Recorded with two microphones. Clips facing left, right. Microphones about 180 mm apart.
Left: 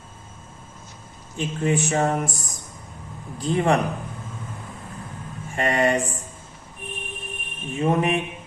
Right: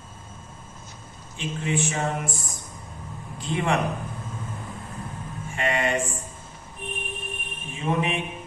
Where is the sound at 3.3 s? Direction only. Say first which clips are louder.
Left 5 dB; 40° left (ahead or behind).